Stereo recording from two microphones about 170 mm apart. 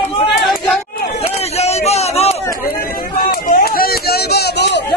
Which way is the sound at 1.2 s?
40° left (ahead or behind).